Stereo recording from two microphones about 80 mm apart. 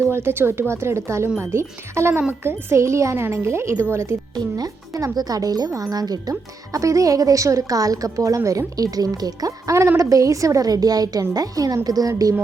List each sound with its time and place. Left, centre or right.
0.0 s a child's voice: right
4.4 s a woman's voice: right